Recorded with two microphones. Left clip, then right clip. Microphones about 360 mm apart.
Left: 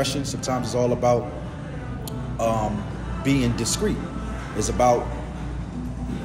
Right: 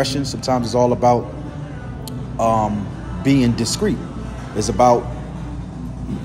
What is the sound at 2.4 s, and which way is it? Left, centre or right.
A man's voice, centre.